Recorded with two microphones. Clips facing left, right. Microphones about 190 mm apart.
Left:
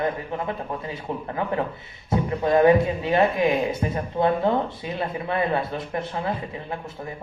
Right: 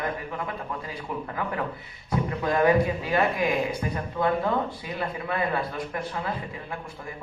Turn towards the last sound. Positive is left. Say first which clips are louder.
# left 4 dB
turn(degrees=25)  # may be behind; listen again after turning